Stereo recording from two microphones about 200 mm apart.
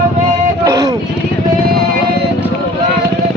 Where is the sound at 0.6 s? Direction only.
15° right (ahead or behind).